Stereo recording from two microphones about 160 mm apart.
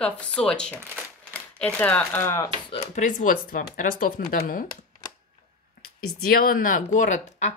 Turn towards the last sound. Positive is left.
turn(degrees=45)  # may be behind; listen again after turning